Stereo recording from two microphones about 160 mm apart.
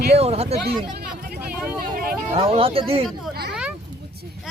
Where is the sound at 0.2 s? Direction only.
40° right (ahead or behind).